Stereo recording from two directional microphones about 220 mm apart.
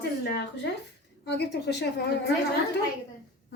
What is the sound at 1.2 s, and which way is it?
A woman's voice, 50° left (ahead or behind).